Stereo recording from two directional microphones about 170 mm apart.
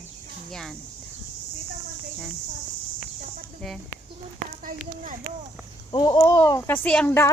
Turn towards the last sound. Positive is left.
turn(degrees=15)  # may be behind; listen again after turning